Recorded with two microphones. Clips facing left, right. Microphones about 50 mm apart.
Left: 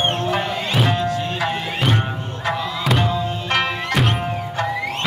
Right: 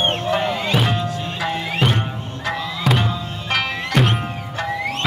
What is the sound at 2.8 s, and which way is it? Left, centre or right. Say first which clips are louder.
Music: even; centre.